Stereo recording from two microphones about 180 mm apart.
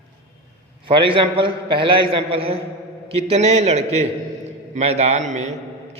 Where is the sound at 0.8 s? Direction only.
30° right (ahead or behind).